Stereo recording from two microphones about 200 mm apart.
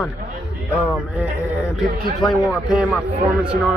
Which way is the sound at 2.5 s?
5° right (ahead or behind).